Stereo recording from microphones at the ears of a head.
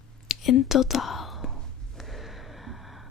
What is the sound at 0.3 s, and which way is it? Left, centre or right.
Speech, left.